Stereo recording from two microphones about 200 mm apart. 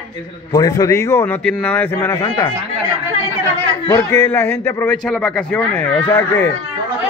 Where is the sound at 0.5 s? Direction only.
15° left (ahead or behind).